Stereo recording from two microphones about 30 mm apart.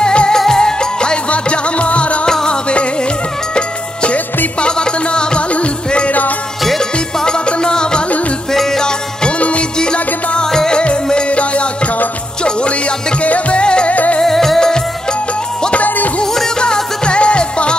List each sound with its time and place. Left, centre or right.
0.0 s music: left
0.5 s music: left
1.3 s music: left
2.2 s music: left
6.8 s music: left
8.6 s music: centre
9.4 s music: left
10.4 s music: centre
10.7 s music: left
13.8 s music: left
14.2 s music: centre
15.7 s music: left
16.5 s music: left